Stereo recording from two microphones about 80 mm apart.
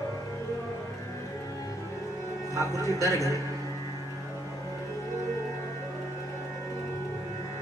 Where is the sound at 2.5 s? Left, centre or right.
Left.